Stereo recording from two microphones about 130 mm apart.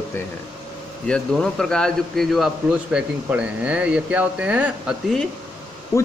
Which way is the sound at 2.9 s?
10° right (ahead or behind).